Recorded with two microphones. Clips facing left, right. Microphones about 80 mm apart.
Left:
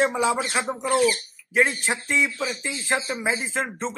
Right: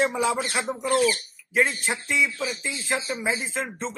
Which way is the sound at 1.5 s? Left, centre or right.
Left.